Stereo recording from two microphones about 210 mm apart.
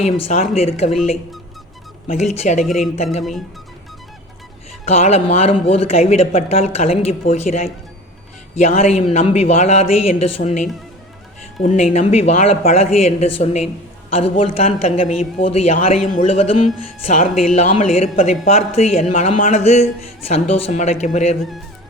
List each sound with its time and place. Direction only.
0.0 s speech: 30° left (ahead or behind)
2.0 s speech: 30° left (ahead or behind)
2.6 s speech: centre (ahead or behind)
2.9 s speech: 30° left (ahead or behind)
4.9 s speech: 30° left (ahead or behind)